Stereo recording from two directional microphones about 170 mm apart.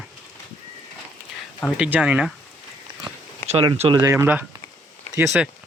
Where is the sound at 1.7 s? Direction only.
5° right (ahead or behind).